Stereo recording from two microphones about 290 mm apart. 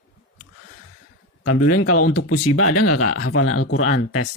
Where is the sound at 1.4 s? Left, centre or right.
Left.